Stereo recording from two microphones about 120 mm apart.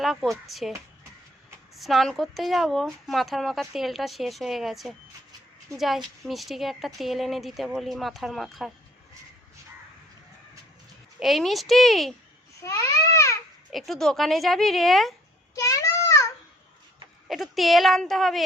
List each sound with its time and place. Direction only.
0.0 s speech: centre (ahead or behind)
1.7 s speech: centre (ahead or behind)
11.2 s speech: centre (ahead or behind)
12.6 s babbling: 30° left (ahead or behind)
13.7 s speech: centre (ahead or behind)
15.5 s a sound: 25° left (ahead or behind)
17.2 s speech: centre (ahead or behind)